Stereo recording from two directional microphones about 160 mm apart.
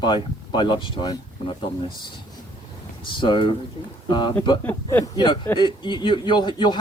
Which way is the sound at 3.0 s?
30° left (ahead or behind).